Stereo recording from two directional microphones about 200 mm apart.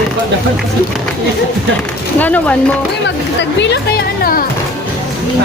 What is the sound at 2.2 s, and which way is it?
Speech, 5° left (ahead or behind).